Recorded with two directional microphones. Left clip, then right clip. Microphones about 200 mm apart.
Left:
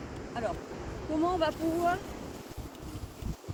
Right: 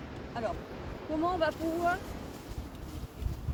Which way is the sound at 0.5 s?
50° left (ahead or behind).